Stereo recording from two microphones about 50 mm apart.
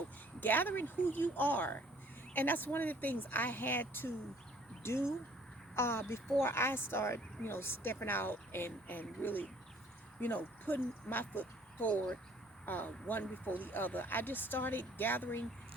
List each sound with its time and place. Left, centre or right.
0.3 s speech: left
4.8 s a woman's voice: left